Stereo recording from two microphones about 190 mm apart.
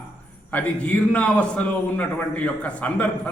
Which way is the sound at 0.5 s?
5° left (ahead or behind).